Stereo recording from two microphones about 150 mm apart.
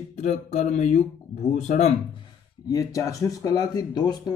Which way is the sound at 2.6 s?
20° left (ahead or behind).